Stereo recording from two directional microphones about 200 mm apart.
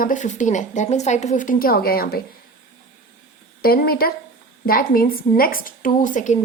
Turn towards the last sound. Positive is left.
turn(degrees=40)  # may be behind; listen again after turning